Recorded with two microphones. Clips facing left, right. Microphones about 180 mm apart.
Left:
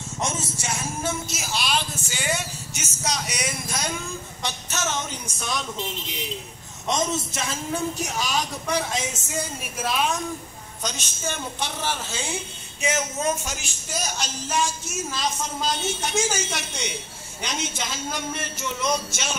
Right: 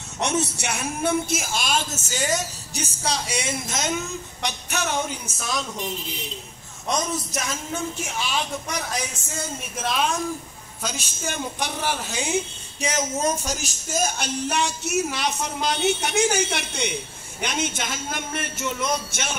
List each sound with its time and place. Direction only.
0.2 s a woman's voice: 70° right (ahead or behind); by 5.7 s centre (ahead or behind)
6.9 s speech: 25° left (ahead or behind)
9.8 s a woman's voice: centre (ahead or behind); by 12.4 s 15° right (ahead or behind)
12.8 s speech: 35° right (ahead or behind); by 19.3 s 55° right (ahead or behind)